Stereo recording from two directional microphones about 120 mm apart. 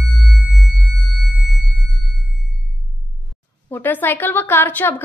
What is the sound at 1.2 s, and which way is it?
Sine wave, centre (ahead or behind).